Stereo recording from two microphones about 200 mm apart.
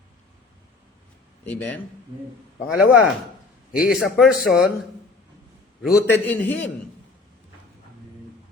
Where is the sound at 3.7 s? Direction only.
5° right (ahead or behind).